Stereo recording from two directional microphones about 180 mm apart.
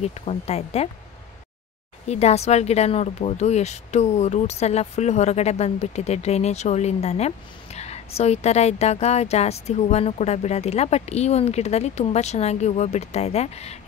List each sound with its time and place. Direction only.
0.0 s speech: 35° left (ahead or behind)
2.0 s speech: 35° left (ahead or behind)